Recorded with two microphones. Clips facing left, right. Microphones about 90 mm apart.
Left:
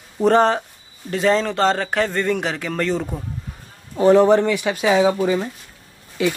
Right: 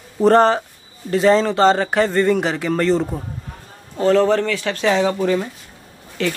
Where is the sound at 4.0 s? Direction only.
15° left (ahead or behind).